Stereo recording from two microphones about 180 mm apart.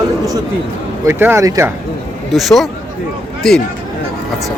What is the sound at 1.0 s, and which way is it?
Speech, 15° right (ahead or behind).